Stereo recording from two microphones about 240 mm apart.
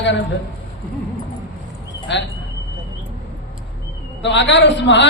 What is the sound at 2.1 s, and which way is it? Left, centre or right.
Speech, left.